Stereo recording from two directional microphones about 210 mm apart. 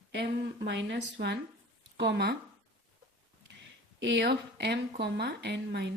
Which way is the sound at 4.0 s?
55° right (ahead or behind).